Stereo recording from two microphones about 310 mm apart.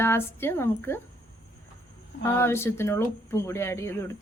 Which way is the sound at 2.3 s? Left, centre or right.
Centre.